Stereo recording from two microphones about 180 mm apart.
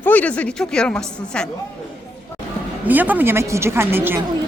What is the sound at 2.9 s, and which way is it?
A woman's voice, 10° right (ahead or behind).